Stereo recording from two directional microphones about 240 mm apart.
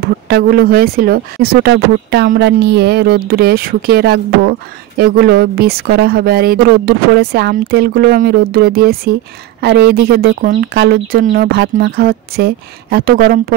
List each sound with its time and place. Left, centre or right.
0.0 s speech: right